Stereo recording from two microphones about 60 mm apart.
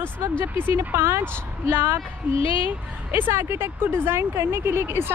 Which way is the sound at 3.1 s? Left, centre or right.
Right.